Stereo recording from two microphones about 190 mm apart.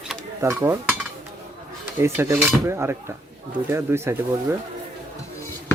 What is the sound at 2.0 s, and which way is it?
Speech, 10° right (ahead or behind).